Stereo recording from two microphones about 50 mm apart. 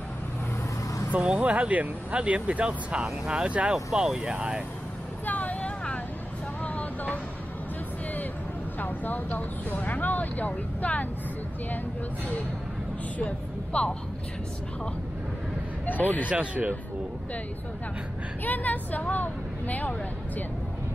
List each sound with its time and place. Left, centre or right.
1.2 s speech: right
3.7 s speech: centre
5.2 s vehicle: left
8.7 s speech: left
13.2 s speech: left
15.9 s a woman's voice: left
16.3 s speech: right
18.4 s a woman's voice: left